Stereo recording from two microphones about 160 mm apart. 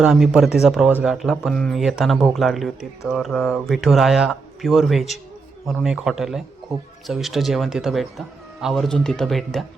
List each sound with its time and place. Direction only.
0.0 s speech: 5° right (ahead or behind)